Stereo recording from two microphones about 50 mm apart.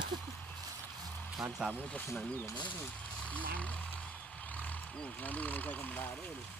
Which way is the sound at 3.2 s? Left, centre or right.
Left.